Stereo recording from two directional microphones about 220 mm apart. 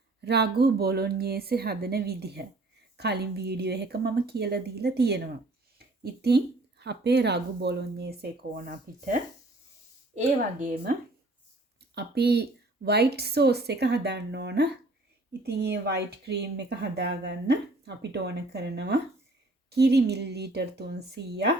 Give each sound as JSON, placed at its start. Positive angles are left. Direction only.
{"t": 0.3, "sound": "speech", "side_deg": -50}
{"t": 11.9, "sound": "speech", "side_deg": -45}